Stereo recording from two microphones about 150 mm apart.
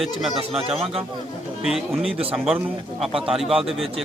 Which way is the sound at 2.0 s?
40° right (ahead or behind).